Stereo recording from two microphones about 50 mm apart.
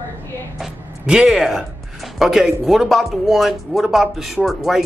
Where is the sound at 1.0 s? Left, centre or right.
Centre.